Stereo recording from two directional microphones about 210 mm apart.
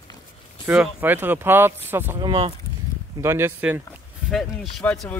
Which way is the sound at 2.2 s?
25° right (ahead or behind).